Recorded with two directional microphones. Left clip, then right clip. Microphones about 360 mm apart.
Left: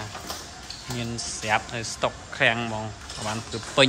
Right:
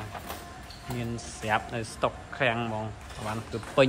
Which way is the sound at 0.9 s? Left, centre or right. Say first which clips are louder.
Left 4 dB; centre.